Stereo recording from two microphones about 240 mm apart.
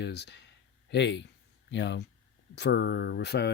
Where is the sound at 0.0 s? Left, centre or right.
Left.